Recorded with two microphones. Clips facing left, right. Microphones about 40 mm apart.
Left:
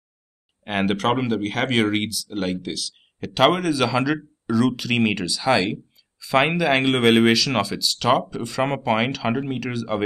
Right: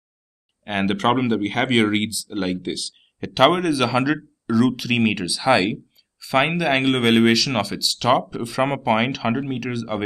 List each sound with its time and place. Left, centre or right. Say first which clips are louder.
0.7 s speech: right 1 dB; centre